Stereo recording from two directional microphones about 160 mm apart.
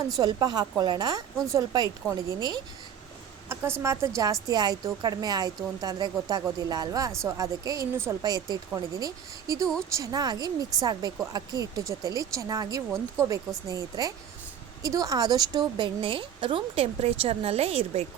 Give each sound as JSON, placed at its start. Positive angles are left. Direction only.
{"t": 0.2, "sound": "speech", "side_deg": -25}
{"t": 3.5, "sound": "a sound", "side_deg": -15}
{"t": 3.8, "sound": "a woman's voice", "side_deg": -20}